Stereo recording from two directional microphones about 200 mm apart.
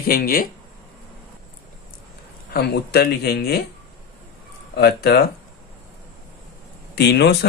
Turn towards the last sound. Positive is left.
turn(degrees=55)  # may be behind; listen again after turning